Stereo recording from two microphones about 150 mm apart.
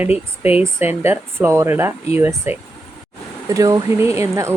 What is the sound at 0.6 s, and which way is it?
Speech, 15° right (ahead or behind).